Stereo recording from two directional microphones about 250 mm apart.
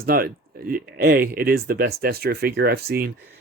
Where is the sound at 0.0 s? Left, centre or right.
Right.